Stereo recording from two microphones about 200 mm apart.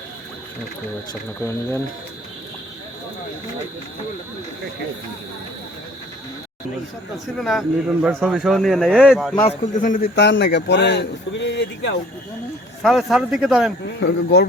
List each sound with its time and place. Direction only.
1.4 s speech: 15° left (ahead or behind)
7.3 s a man's voice: centre (ahead or behind)
9.7 s a man's voice: 40° left (ahead or behind); by 11.9 s 60° left (ahead or behind)
12.8 s a man's voice: centre (ahead or behind)
13.8 s a man's voice: 60° left (ahead or behind)